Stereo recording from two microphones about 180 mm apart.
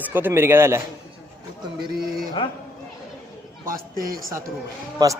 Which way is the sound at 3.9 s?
55° right (ahead or behind).